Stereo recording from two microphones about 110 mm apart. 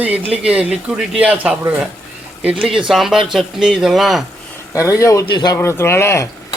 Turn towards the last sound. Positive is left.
turn(degrees=25)  # may be behind; listen again after turning